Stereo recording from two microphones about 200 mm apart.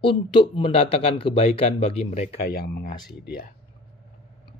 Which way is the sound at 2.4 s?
50° left (ahead or behind).